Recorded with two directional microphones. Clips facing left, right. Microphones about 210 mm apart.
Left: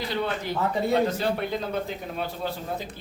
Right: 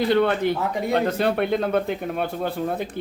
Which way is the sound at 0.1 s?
60° right (ahead or behind).